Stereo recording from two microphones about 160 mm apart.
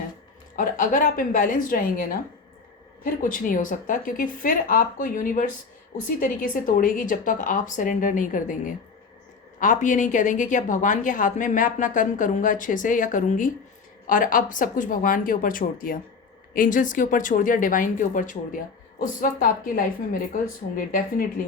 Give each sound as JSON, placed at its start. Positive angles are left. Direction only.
{"t": 0.5, "sound": "a woman's voice", "side_deg": 55}